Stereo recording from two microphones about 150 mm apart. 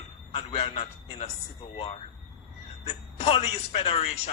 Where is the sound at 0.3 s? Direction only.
40° left (ahead or behind).